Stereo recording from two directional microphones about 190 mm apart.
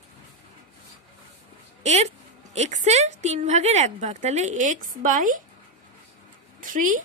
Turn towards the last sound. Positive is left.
turn(degrees=-45)  # may be behind; listen again after turning